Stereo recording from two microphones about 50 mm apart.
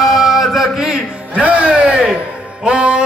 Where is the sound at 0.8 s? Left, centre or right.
Centre.